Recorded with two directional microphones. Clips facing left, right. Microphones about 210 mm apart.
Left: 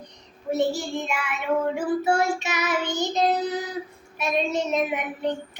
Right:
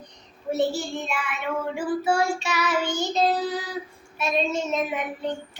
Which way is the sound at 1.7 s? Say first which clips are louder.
Left 1 dB; 20° left (ahead or behind).